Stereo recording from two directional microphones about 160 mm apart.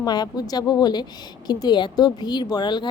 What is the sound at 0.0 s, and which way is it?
Speech, 25° left (ahead or behind).